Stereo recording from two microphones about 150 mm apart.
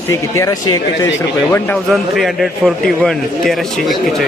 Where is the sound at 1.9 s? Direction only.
Centre (ahead or behind).